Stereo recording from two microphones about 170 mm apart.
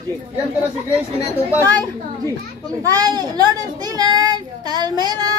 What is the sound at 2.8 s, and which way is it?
A child's voice, 20° right (ahead or behind).